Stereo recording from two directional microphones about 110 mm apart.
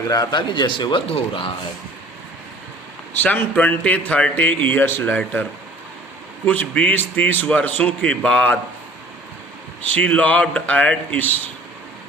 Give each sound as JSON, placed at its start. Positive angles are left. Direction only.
{"t": 0.1, "sound": "speech", "side_deg": 35}
{"t": 3.2, "sound": "a man's voice", "side_deg": 15}
{"t": 9.9, "sound": "a man's voice", "side_deg": 15}